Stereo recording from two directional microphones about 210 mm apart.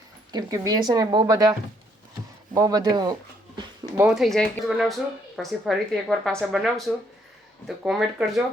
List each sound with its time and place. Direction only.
0.3 s speech: 15° right (ahead or behind)
2.6 s speech: 15° right (ahead or behind)
3.9 s speech: 5° right (ahead or behind)